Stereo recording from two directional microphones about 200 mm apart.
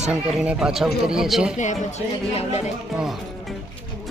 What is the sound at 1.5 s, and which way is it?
Speech, 40° left (ahead or behind).